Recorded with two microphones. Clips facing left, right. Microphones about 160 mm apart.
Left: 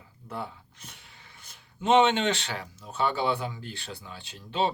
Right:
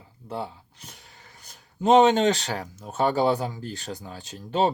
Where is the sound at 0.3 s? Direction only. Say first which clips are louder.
Right 4 dB; 30° right (ahead or behind).